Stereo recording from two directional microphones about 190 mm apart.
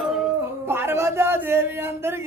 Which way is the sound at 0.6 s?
10° right (ahead or behind).